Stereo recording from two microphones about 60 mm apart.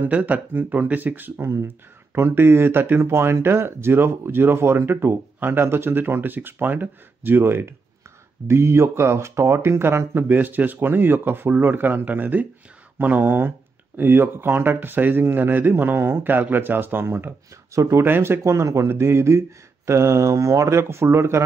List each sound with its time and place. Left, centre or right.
0.0 s speech: right
2.1 s speech: right
17.7 s speech: right
18.0 s speech: right
18.4 s speech: right
18.9 s speech: right
20.6 s speech: right